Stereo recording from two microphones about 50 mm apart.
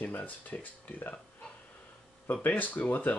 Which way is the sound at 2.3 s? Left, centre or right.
Left.